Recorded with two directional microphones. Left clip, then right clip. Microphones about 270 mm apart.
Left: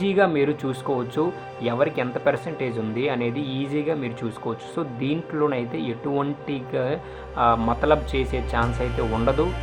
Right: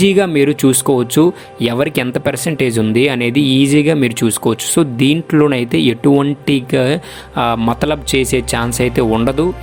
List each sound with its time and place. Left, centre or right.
0.0 s speech: right